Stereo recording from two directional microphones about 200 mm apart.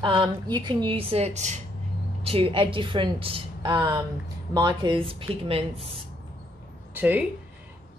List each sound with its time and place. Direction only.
0.0 s a woman's voice: 25° right (ahead or behind)
6.9 s speech: 10° right (ahead or behind)